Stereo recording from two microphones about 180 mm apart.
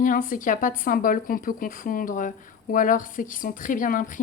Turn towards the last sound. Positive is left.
turn(degrees=50)  # may be behind; listen again after turning